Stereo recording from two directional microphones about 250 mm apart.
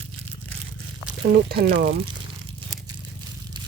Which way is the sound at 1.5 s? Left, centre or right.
Right.